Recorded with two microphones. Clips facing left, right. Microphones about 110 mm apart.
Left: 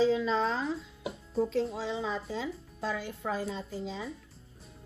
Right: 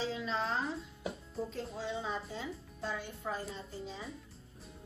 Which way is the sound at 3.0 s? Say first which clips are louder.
Left 5 dB; 90° left.